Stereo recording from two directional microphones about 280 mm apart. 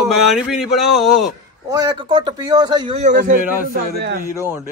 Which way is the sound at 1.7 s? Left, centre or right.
Centre.